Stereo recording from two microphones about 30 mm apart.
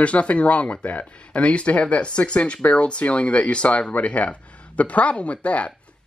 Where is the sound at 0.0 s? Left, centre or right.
Left.